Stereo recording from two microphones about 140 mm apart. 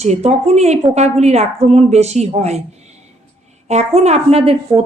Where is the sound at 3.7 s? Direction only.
50° right (ahead or behind).